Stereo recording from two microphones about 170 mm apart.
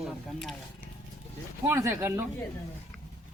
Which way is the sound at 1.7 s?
15° right (ahead or behind).